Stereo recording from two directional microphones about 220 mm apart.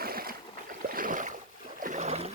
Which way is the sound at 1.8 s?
35° right (ahead or behind).